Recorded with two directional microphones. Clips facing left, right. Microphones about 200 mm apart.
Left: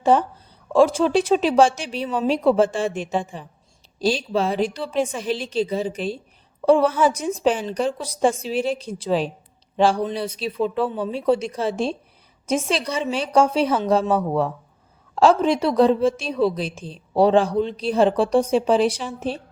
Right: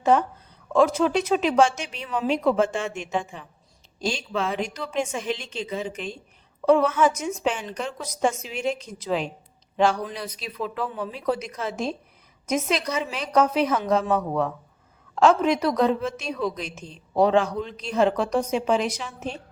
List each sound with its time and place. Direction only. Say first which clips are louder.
0.0 s a woman's voice: left 2 dB; 30° left (ahead or behind)